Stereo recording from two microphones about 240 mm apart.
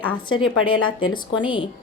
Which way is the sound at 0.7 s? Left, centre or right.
Left.